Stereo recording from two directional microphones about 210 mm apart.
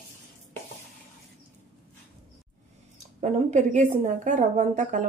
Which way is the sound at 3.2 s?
35° right (ahead or behind).